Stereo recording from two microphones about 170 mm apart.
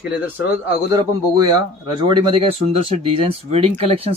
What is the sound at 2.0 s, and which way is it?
Speech, 30° right (ahead or behind).